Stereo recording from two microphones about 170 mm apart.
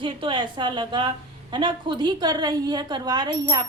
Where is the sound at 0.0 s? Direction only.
30° right (ahead or behind).